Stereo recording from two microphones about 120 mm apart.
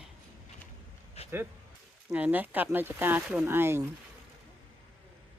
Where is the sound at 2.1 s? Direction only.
15° right (ahead or behind).